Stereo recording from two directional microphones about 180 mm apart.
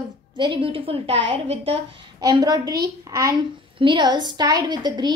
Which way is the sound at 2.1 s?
20° right (ahead or behind).